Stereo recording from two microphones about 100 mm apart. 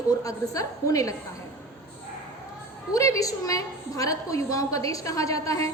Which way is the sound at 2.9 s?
35° left (ahead or behind).